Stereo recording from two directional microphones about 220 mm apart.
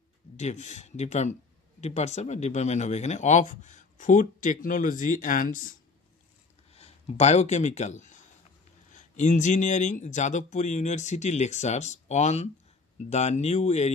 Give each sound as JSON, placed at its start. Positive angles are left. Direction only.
{"t": 0.4, "sound": "speech", "side_deg": 30}
{"t": 6.7, "sound": "speech", "side_deg": 30}